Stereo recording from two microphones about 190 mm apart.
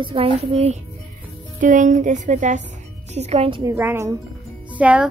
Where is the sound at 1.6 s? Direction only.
45° right (ahead or behind).